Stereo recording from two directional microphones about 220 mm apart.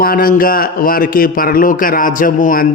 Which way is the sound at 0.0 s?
40° left (ahead or behind).